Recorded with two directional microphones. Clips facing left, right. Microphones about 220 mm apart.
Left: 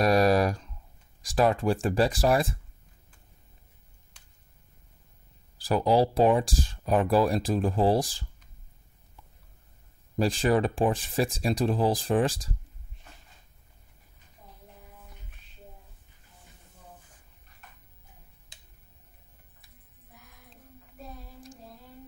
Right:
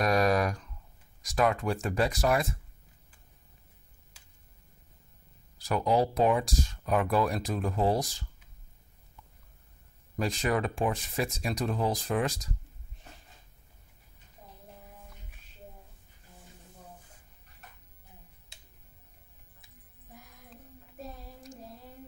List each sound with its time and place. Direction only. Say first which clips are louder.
0.0 s a sound: left 4 dB; 35° left (ahead or behind)
1.2 s speech: left 4 dB; 30° left (ahead or behind)
5.6 s speech: left 4 dB; 30° left (ahead or behind)
10.1 s speech: left 5 dB; 30° left (ahead or behind)